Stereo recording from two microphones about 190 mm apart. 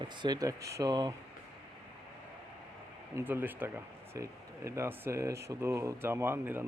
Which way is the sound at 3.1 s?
10° right (ahead or behind).